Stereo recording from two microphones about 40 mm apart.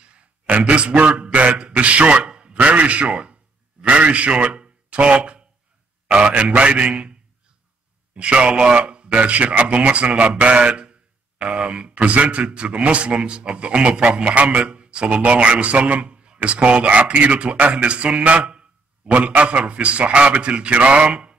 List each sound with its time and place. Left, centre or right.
0.5 s a man's voice: right
1.8 s a sound: right
2.7 s a man's voice: right